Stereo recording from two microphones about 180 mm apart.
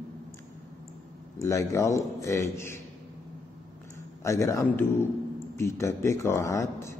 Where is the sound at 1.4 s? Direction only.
15° left (ahead or behind).